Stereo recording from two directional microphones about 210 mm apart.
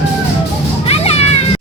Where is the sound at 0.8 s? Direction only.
30° left (ahead or behind).